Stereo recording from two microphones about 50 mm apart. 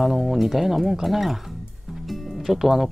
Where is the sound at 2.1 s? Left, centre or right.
Centre.